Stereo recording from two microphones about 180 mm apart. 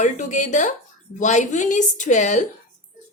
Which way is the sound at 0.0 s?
45° left (ahead or behind).